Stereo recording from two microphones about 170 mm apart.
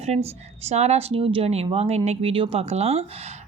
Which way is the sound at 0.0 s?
40° right (ahead or behind).